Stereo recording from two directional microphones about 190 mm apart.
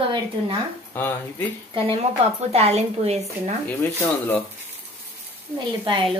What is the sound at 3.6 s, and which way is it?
Speech, 10° left (ahead or behind).